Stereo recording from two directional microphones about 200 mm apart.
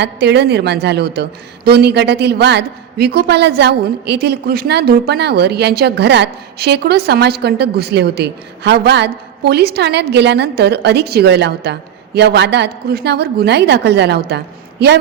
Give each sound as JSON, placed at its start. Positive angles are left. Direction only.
{"t": 0.0, "sound": "a woman's voice", "side_deg": -55}